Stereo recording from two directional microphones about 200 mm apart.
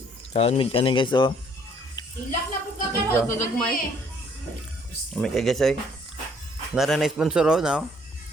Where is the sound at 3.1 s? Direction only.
10° left (ahead or behind).